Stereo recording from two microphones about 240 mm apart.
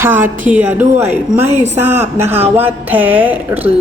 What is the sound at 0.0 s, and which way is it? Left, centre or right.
A woman's voice, centre.